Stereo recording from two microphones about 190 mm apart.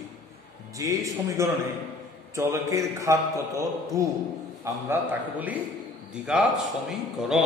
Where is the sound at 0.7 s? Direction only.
15° right (ahead or behind).